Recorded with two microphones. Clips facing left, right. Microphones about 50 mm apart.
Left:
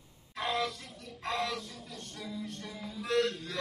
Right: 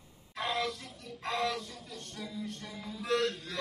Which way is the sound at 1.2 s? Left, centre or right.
Centre.